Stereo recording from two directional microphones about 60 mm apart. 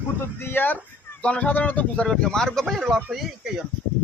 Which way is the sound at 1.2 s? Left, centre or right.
Left.